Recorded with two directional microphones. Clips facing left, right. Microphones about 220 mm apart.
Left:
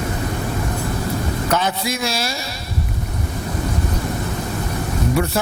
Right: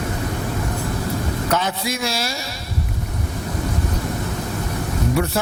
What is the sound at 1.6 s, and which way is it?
Speech, 15° left (ahead or behind).